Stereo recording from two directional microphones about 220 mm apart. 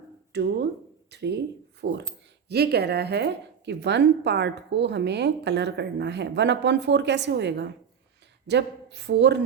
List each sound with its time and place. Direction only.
0.3 s a woman's voice: 50° right (ahead or behind)